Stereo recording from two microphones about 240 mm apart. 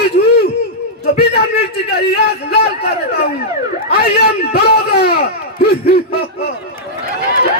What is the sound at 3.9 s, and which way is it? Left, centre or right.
A man's voice, left.